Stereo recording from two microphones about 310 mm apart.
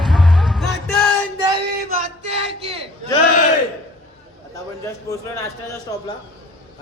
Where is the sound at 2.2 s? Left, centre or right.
Centre.